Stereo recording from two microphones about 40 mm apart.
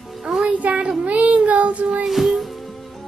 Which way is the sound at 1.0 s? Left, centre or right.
Right.